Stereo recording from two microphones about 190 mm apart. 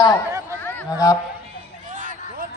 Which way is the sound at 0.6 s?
15° left (ahead or behind).